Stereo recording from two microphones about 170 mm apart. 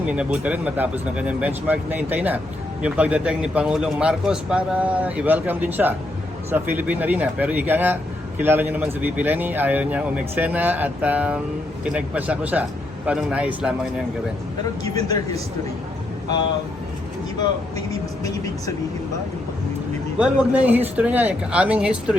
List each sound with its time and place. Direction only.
0.0 s a man's voice: 5° right (ahead or behind)
17.4 s speech: 20° left (ahead or behind)
20.1 s a man's voice: 5° right (ahead or behind)